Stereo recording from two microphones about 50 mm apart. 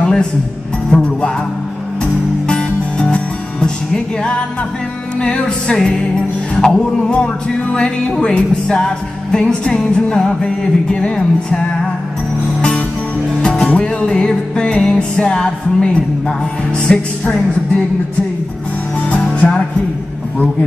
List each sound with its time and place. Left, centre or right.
0.0 s music: centre
2.4 s music: centre
13.3 s music: centre